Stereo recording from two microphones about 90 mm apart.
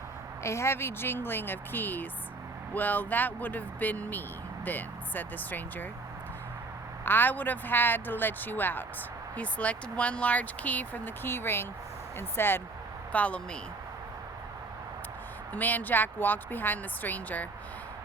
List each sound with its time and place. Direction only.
0.4 s speech: 30° left (ahead or behind)
7.0 s speech: 20° left (ahead or behind)
13.1 s speech: 15° left (ahead or behind)
15.5 s speech: 20° left (ahead or behind)